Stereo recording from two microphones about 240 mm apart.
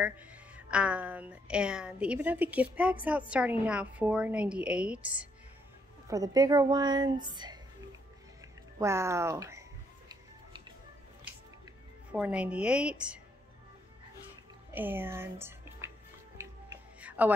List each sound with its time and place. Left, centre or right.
0.0 s a woman's voice: centre
8.7 s music: centre
12.1 s speech: centre
14.7 s speech: centre
16.3 s music: centre